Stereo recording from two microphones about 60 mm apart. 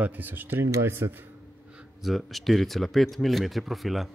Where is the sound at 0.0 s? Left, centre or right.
Right.